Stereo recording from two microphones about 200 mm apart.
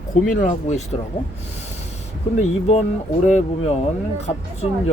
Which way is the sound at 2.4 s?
30° left (ahead or behind).